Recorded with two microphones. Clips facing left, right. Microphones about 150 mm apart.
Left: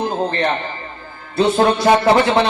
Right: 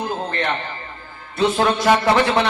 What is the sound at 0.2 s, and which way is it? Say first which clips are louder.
A man's voice: left 5 dB; 25° left (ahead or behind).